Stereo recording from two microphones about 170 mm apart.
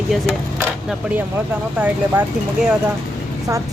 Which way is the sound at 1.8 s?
10° right (ahead or behind).